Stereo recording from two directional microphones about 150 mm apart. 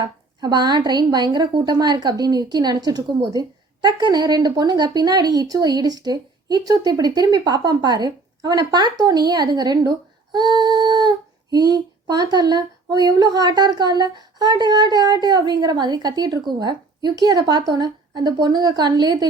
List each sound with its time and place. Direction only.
0.0 s a woman's voice: 30° right (ahead or behind)